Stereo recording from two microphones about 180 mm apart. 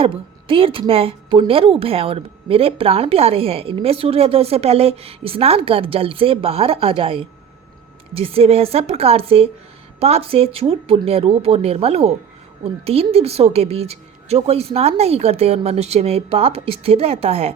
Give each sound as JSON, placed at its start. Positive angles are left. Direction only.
{"t": 0.0, "sound": "a woman's voice", "side_deg": -30}